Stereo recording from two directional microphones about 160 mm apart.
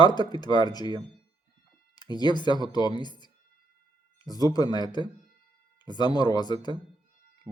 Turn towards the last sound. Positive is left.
turn(degrees=-15)  # may be behind; listen again after turning